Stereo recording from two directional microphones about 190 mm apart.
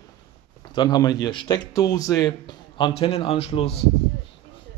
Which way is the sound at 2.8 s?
25° left (ahead or behind).